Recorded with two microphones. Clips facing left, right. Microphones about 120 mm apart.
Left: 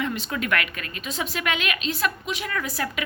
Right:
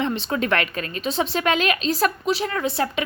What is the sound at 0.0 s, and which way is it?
A woman's voice, 30° right (ahead or behind).